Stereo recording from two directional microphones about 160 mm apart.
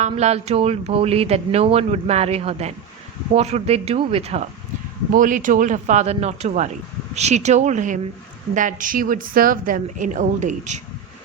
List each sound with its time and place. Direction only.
0.0 s speech: 45° right (ahead or behind)
5.1 s a woman's voice: 55° right (ahead or behind)